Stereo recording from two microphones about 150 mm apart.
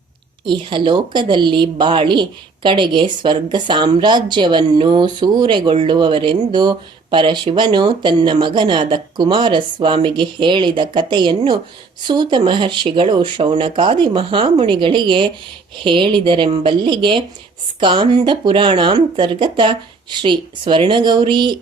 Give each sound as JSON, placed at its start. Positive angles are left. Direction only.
{"t": 0.4, "sound": "speech", "side_deg": -30}